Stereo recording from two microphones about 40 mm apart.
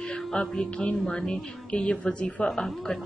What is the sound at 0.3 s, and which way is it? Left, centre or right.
A woman's voice, centre.